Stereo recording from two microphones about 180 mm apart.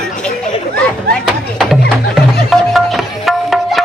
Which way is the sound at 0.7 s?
5° left (ahead or behind).